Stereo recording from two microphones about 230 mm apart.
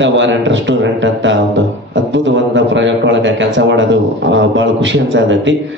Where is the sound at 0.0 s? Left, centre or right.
Right.